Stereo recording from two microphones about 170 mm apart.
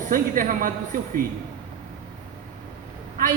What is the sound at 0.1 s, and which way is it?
Speech, 55° right (ahead or behind).